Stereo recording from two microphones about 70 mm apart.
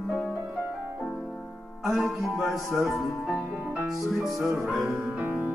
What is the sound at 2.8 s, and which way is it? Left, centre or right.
Speech, centre.